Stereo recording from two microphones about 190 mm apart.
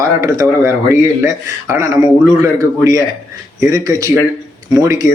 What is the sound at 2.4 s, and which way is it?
Speech, 15° right (ahead or behind).